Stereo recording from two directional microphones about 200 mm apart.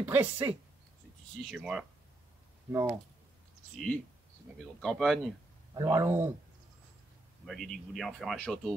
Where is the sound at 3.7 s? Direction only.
Centre (ahead or behind).